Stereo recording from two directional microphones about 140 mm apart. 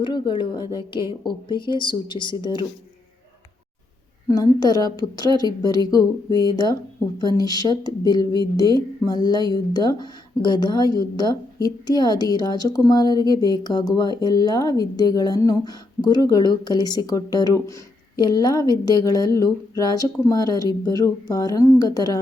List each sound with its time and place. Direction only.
0.0 s a woman's voice: 35° left (ahead or behind)
4.3 s speech: 25° left (ahead or behind)